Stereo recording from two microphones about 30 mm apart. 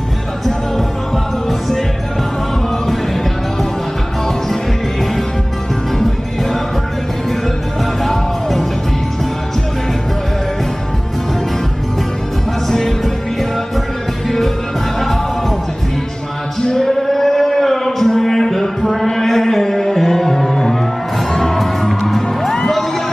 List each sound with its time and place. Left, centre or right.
8.0 s music: centre
12.6 s music: centre
16.6 s music: centre
17.1 s a sound: centre
18.9 s music: centre